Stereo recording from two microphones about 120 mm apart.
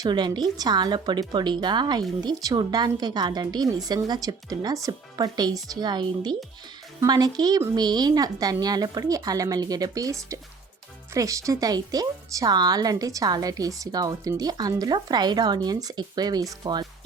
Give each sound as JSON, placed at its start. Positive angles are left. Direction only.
{"t": 0.0, "sound": "speech", "side_deg": -35}